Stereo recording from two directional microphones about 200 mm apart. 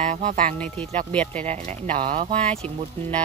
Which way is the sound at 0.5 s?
5° left (ahead or behind).